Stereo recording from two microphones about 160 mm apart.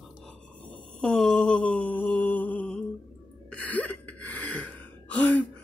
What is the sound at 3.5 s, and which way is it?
Gasp, 10° left (ahead or behind).